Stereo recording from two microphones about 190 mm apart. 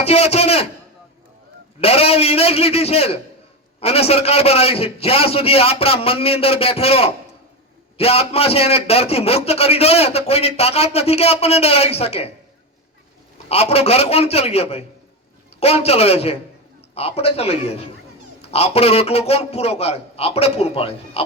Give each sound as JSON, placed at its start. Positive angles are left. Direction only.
{"t": 0.0, "sound": "a man's voice", "side_deg": 35}
{"t": 1.8, "sound": "a man's voice", "side_deg": 30}
{"t": 13.5, "sound": "a man's voice", "side_deg": 35}